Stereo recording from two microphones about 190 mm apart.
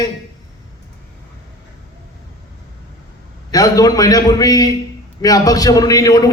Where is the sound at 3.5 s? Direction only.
20° left (ahead or behind).